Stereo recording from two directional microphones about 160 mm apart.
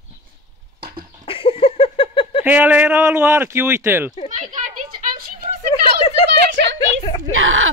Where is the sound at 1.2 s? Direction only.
35° left (ahead or behind).